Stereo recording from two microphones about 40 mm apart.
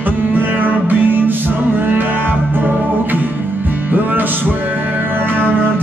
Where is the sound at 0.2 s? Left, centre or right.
Right.